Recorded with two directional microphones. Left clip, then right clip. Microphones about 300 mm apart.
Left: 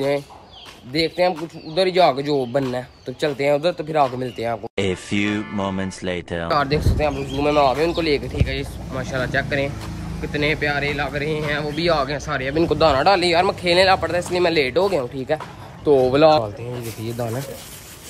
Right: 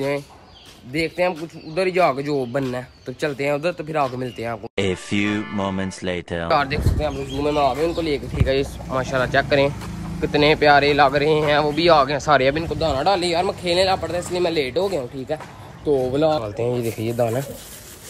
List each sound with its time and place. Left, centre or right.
0.9 s speech: centre
16.1 s speech: left
17.2 s speech: centre